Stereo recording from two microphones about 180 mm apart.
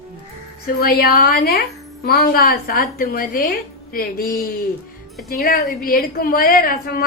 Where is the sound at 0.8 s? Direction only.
60° left (ahead or behind).